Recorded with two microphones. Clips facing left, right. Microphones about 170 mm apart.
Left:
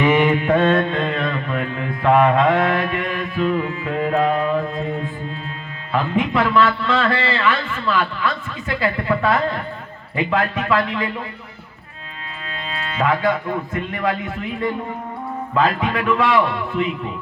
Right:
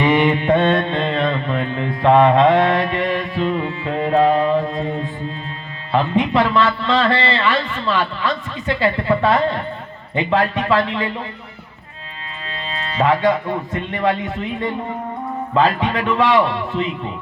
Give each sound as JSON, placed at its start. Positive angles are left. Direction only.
{"t": 0.0, "sound": "mantra", "side_deg": -30}
{"t": 5.9, "sound": "a man's voice", "side_deg": -30}
{"t": 10.2, "sound": "mantra", "side_deg": -30}
{"t": 12.5, "sound": "speech", "side_deg": -30}
{"t": 15.5, "sound": "a man's voice", "side_deg": -30}